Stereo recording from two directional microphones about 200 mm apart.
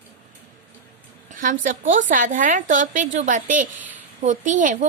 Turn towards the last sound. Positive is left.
turn(degrees=-40)  # may be behind; listen again after turning